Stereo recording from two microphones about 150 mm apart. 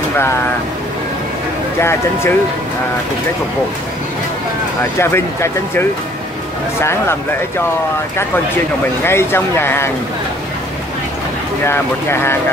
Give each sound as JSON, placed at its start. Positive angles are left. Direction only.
{"t": 1.8, "sound": "speech", "side_deg": 15}
{"t": 4.9, "sound": "speech", "side_deg": 15}
{"t": 9.0, "sound": "speech", "side_deg": 15}
{"t": 11.6, "sound": "speech", "side_deg": 15}